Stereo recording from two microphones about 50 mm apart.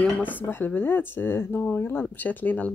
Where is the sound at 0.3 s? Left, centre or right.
Left.